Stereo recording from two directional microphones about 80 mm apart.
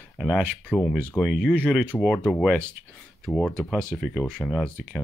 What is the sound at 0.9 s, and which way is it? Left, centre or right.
Speech, centre.